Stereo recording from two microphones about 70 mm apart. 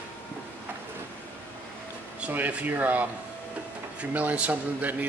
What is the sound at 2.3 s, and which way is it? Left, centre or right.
A man's voice, right.